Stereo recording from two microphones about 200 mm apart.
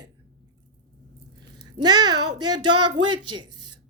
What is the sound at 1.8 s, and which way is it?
A woman's voice, 20° right (ahead or behind).